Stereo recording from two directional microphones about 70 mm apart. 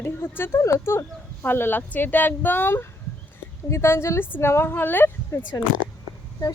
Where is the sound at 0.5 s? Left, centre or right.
Left.